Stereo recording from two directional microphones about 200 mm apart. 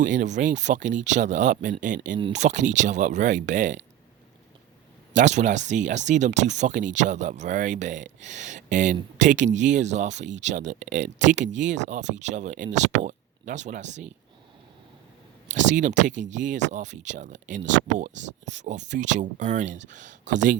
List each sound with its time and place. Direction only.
0.0 s speech: 40° right (ahead or behind)
5.1 s speech: 35° right (ahead or behind)
15.5 s speech: 40° right (ahead or behind)